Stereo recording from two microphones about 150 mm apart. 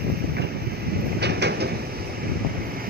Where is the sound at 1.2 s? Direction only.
90° right.